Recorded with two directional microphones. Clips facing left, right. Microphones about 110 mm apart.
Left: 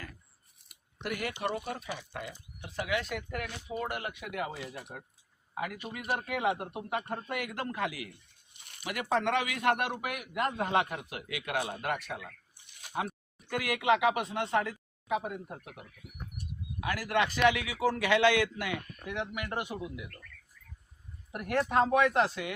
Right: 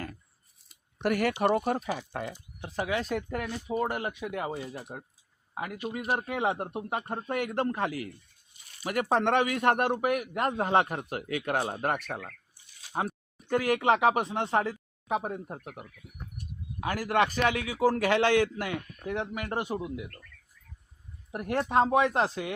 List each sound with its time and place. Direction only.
0.6 s a sound: 65° left (ahead or behind)
1.0 s a man's voice: 60° right (ahead or behind); by 4.1 s 35° right (ahead or behind)
4.2 s a man's voice: 25° right (ahead or behind); by 12.3 s 50° right (ahead or behind)
12.9 s speech: 35° right (ahead or behind)
16.8 s a man's voice: 40° right (ahead or behind)
21.3 s speech: 25° right (ahead or behind)